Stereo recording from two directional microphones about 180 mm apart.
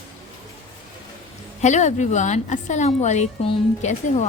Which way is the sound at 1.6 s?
40° left (ahead or behind).